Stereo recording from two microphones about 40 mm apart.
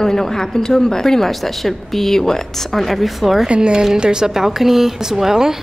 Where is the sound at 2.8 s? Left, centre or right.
Centre.